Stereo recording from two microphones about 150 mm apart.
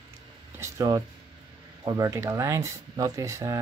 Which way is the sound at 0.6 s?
20° right (ahead or behind).